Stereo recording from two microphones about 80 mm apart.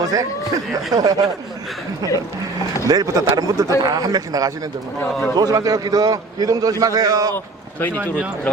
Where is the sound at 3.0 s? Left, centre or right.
Right.